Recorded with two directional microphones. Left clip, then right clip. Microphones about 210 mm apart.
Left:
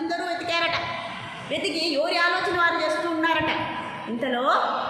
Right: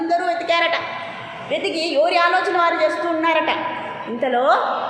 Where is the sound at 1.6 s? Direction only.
10° left (ahead or behind).